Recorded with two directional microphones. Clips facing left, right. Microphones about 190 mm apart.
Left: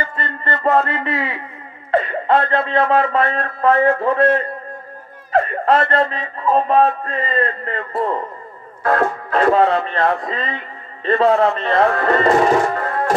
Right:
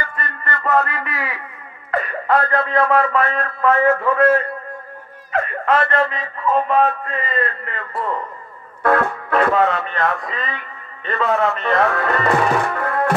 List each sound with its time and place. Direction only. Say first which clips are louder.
0.0 s a man's voice: left 3 dB; 25° left (ahead or behind)
9.3 s speech: left 2 dB; 30° left (ahead or behind)